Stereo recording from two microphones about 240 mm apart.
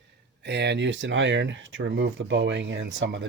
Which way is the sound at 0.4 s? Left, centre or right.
Right.